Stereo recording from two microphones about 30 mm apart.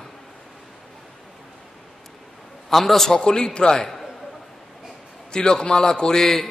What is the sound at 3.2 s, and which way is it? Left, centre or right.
Speech, left.